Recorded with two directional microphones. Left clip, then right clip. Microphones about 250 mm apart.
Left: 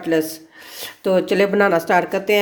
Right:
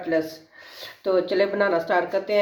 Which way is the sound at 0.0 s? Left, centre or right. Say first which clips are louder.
Left 5 dB; left.